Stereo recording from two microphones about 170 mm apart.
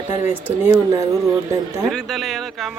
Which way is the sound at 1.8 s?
Centre (ahead or behind).